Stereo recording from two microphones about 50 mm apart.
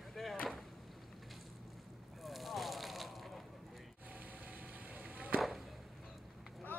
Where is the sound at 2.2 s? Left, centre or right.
Centre.